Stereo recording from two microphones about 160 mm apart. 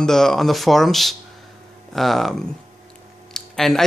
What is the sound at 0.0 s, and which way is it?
Speech, 5° left (ahead or behind).